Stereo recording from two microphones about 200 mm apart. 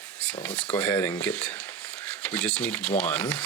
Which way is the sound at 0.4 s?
5° left (ahead or behind).